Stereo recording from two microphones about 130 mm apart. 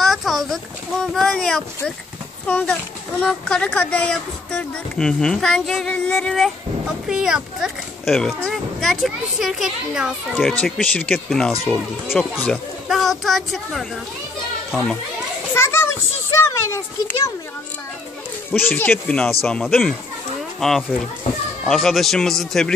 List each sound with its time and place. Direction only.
0.0 s a sound: centre (ahead or behind)
2.4 s a child's voice: 10° left (ahead or behind)
10.6 s speech: 10° left (ahead or behind)
11.2 s a child's voice: centre (ahead or behind)
15.5 s children playing: 20° left (ahead or behind)
16.3 s a child's voice: 20° left (ahead or behind)
18.5 s a child's voice: 15° left (ahead or behind)